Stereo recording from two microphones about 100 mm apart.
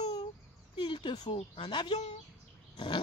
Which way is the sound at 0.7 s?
55° left (ahead or behind).